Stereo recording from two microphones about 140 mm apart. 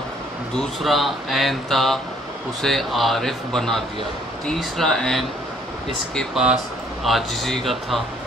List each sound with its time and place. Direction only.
0.6 s speech: centre (ahead or behind)